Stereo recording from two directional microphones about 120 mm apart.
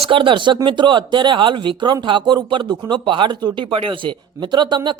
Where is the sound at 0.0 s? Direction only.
45° right (ahead or behind).